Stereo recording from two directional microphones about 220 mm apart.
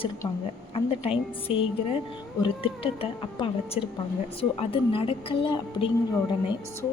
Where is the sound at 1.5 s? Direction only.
25° left (ahead or behind).